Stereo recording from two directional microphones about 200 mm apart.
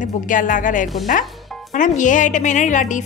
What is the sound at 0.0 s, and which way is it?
A woman's voice, 40° left (ahead or behind).